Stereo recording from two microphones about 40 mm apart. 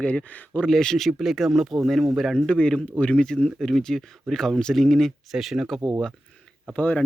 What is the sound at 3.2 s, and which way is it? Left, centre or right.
Speech, centre.